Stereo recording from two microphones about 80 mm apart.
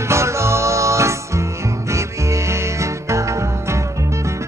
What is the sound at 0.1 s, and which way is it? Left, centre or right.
Music, right.